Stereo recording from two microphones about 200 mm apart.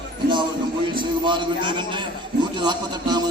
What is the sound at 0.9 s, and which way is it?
A man's voice, 25° right (ahead or behind).